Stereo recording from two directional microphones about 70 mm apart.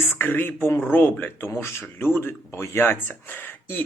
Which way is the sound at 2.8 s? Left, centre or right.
Left.